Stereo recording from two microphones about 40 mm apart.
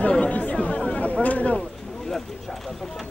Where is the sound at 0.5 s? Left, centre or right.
Left.